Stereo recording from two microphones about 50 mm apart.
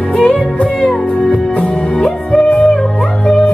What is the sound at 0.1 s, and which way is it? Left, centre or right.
Music, centre.